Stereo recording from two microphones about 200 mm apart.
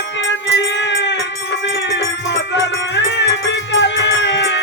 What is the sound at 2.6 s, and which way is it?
Music, 60° left (ahead or behind).